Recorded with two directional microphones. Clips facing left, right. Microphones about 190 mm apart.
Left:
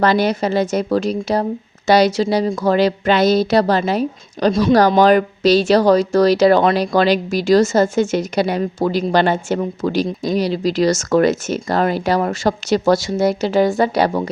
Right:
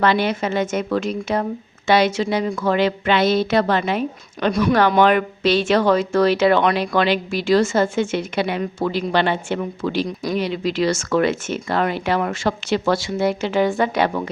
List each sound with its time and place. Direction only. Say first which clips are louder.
0.0 s speech: left 3 dB; 40° left (ahead or behind)